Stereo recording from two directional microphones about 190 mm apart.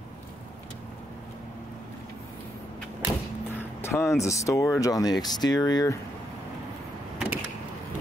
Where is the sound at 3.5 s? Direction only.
10° left (ahead or behind).